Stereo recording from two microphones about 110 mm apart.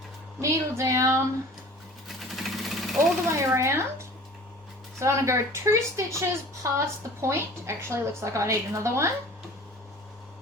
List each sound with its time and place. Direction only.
0.4 s a woman's voice: 30° right (ahead or behind)
2.0 s vehicle: centre (ahead or behind)
3.3 s a woman's voice: 25° right (ahead or behind)